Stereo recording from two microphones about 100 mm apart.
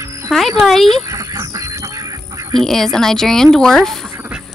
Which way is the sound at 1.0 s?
30° right (ahead or behind).